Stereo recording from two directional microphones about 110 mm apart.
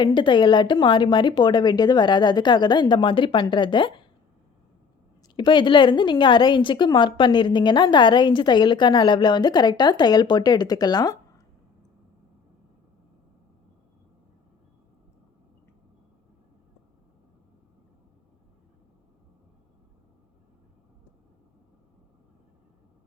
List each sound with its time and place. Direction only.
0.0 s a woman's voice: 45° left (ahead or behind)
5.4 s a woman's voice: 45° left (ahead or behind)